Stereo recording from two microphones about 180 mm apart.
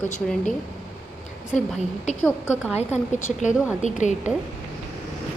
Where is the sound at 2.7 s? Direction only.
35° left (ahead or behind).